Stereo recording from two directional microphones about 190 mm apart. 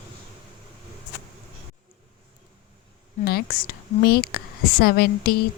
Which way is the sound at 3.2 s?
50° left (ahead or behind).